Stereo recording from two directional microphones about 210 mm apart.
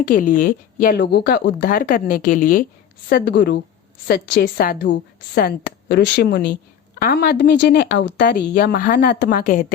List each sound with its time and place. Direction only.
0.1 s a woman's voice: 40° left (ahead or behind)
3.1 s a woman's voice: 50° left (ahead or behind)